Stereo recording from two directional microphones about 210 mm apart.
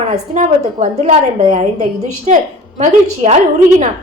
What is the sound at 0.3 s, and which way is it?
A woman's voice, 35° right (ahead or behind).